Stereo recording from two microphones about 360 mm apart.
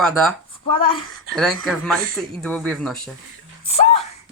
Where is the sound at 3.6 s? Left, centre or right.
Centre.